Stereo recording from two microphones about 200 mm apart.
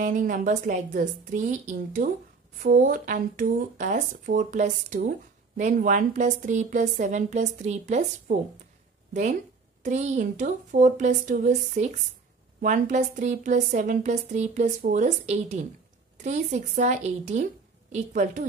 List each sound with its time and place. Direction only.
0.0 s speech: 45° right (ahead or behind)
9.8 s speech: 35° right (ahead or behind)